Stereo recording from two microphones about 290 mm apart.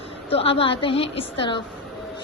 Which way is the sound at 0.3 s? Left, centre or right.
Centre.